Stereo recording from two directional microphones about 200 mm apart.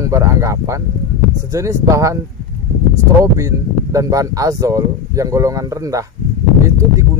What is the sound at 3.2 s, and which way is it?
Speech, 15° right (ahead or behind).